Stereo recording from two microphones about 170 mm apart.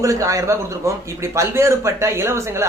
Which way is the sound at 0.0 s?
20° right (ahead or behind).